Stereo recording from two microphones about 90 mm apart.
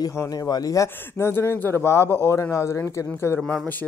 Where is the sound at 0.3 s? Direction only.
45° left (ahead or behind); by 3.3 s 30° left (ahead or behind).